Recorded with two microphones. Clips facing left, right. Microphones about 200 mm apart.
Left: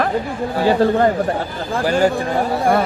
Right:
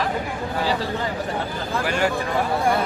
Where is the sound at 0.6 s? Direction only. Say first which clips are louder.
Left 12 dB; 55° left (ahead or behind).